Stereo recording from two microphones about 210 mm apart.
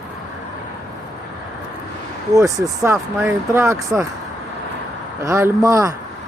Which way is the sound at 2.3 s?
15° right (ahead or behind).